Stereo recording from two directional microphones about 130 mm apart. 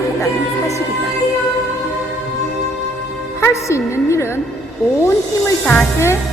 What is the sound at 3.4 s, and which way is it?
Speech, 25° left (ahead or behind).